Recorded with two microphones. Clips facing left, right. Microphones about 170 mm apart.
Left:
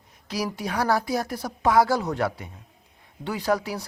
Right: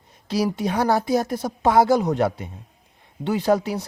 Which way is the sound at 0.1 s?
30° right (ahead or behind).